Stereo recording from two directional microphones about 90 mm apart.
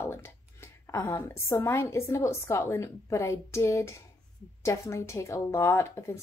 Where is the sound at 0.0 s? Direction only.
30° left (ahead or behind).